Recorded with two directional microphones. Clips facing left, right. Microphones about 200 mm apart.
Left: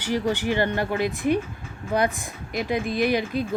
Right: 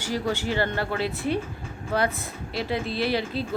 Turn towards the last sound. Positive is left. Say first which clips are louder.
# left 3 dB
turn(degrees=15)  # may be behind; listen again after turning